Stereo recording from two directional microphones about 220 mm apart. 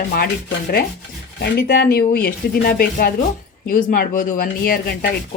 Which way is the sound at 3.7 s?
40° left (ahead or behind).